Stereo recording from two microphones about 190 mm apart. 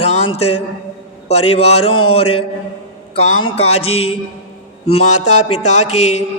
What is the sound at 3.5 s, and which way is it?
Music, 35° left (ahead or behind).